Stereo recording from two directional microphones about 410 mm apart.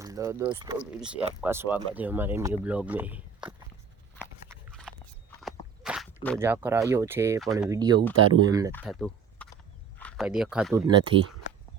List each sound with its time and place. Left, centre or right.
0.0 s speech: centre
4.7 s biting: centre
5.4 s walk: centre
6.2 s speech: centre
8.1 s speech: right
8.7 s speech: centre